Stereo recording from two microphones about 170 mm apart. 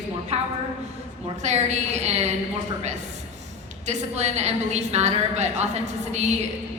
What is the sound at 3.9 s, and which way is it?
A woman's voice, 40° right (ahead or behind).